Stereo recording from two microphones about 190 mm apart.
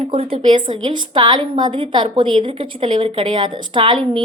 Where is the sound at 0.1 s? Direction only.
30° right (ahead or behind).